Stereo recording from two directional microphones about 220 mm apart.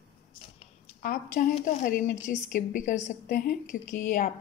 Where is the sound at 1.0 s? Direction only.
35° left (ahead or behind).